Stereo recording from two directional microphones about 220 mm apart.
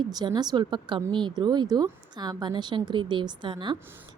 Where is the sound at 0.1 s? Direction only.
20° right (ahead or behind).